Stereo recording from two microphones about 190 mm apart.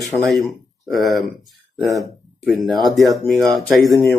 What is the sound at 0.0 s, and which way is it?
Speech, centre (ahead or behind).